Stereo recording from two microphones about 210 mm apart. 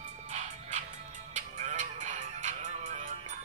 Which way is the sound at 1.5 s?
35° right (ahead or behind).